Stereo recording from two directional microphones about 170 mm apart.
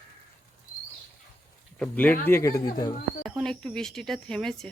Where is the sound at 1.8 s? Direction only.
10° left (ahead or behind).